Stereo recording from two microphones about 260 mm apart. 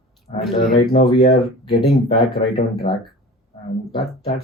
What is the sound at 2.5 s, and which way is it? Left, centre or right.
Speech, left.